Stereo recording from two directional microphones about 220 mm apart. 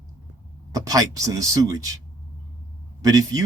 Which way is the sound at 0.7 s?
15° right (ahead or behind).